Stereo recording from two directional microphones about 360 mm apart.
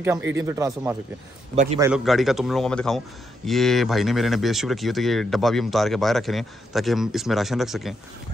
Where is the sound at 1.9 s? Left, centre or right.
Centre.